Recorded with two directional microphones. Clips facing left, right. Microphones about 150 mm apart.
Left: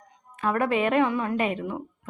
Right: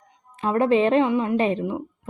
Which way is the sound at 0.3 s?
25° right (ahead or behind).